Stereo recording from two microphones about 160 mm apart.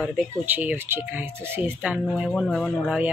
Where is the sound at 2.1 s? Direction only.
Centre (ahead or behind).